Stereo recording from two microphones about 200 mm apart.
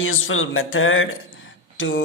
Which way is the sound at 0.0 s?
85° left.